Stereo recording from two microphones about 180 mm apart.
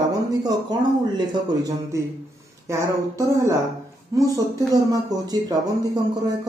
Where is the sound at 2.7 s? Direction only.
15° right (ahead or behind).